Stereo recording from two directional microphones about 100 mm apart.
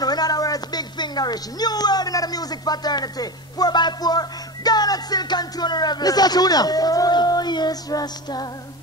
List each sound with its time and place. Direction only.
0.0 s speech: 40° left (ahead or behind)